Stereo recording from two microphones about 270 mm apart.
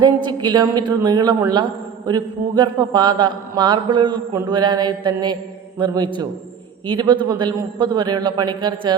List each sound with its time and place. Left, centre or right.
0.0 s speech: centre